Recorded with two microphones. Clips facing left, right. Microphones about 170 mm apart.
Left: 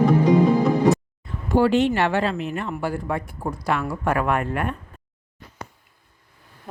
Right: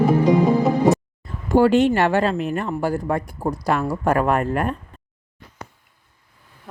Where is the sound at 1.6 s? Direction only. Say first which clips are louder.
Right 3 dB; 45° right (ahead or behind).